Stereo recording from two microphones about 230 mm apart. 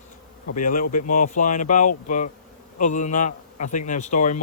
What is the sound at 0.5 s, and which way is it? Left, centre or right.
A man's voice, left.